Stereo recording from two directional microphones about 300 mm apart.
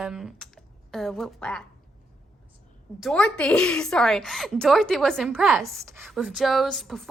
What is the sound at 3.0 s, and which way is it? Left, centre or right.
A woman's voice, centre.